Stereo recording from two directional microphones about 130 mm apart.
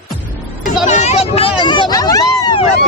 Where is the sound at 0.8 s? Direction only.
60° left (ahead or behind).